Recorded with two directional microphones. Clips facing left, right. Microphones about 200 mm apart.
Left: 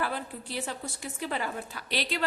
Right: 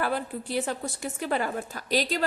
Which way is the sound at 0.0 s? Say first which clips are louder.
Right 4 dB; 50° right (ahead or behind).